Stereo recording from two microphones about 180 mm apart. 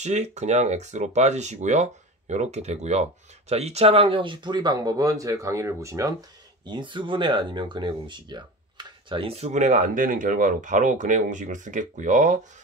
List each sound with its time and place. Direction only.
0.0 s speech: 40° right (ahead or behind)